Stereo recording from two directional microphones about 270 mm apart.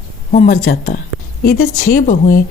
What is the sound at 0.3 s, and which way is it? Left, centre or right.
A woman's voice, left.